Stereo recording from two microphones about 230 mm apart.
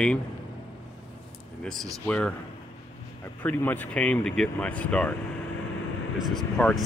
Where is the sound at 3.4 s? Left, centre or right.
Centre.